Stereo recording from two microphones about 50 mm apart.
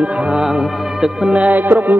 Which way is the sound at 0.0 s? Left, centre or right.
Centre.